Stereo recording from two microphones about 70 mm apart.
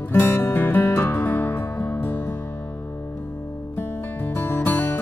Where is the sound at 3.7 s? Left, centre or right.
Left.